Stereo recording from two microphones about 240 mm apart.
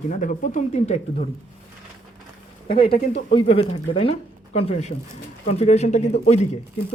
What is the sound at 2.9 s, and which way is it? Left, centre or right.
Speech, left.